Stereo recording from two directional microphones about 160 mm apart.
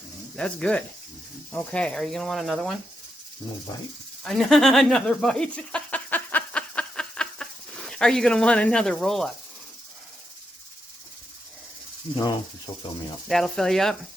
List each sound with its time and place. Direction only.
0.3 s speech: 5° left (ahead or behind)
4.2 s a sound: 5° left (ahead or behind)
7.9 s speech: 5° left (ahead or behind)
12.1 s snake: 35° left (ahead or behind)
13.2 s speech: centre (ahead or behind)